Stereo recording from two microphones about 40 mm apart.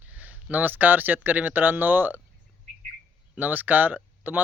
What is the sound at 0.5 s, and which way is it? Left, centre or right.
Speech, right.